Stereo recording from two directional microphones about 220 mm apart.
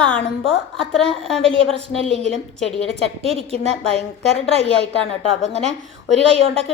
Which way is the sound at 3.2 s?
25° right (ahead or behind).